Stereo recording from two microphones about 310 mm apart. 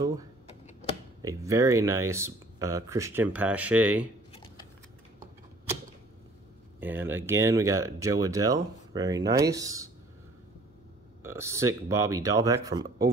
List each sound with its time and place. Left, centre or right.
0.0 s speech: centre
4.3 s typing: centre
6.8 s speech: centre
11.2 s speech: centre